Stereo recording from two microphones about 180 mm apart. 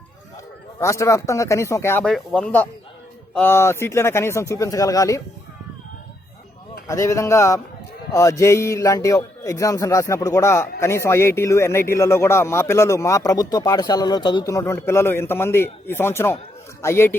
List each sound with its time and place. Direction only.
0.8 s speech: 15° left (ahead or behind)
6.8 s speech: 15° left (ahead or behind)